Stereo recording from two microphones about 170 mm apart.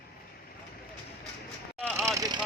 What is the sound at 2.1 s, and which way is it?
Vehicle, 20° right (ahead or behind).